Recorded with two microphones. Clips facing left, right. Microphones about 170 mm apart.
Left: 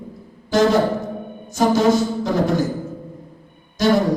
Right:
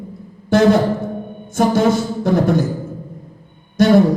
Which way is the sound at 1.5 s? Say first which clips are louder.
Right 1 dB; 55° right (ahead or behind).